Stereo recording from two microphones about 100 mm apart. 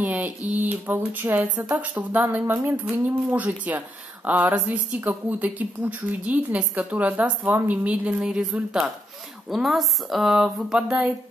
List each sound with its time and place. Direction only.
0.0 s speech: 15° right (ahead or behind)